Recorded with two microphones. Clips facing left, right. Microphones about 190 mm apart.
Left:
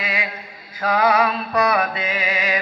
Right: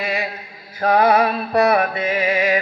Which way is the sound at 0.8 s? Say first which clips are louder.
Right 3 dB; 45° right (ahead or behind).